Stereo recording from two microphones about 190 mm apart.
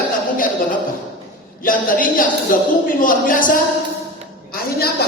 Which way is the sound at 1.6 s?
45° left (ahead or behind).